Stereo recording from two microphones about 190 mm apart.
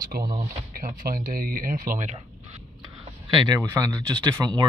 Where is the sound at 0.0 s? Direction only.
50° right (ahead or behind).